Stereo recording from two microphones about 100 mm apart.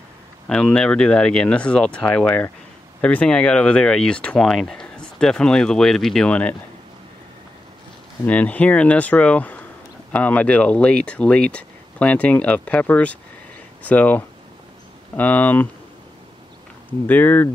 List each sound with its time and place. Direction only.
0.5 s speech: 10° left (ahead or behind)
8.3 s speech: 15° left (ahead or behind)
17.0 s speech: 20° left (ahead or behind)